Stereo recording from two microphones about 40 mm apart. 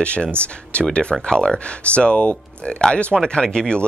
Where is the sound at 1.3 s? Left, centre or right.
Left.